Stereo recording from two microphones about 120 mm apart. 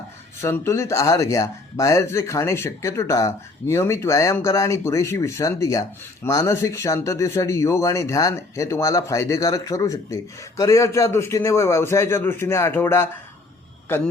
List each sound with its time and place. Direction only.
0.4 s speech: 20° left (ahead or behind)